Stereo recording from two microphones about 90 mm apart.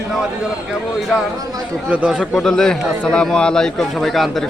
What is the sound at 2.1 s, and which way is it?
A man's voice, 5° left (ahead or behind).